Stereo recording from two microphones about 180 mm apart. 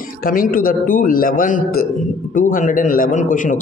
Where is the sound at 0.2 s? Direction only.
50° left (ahead or behind).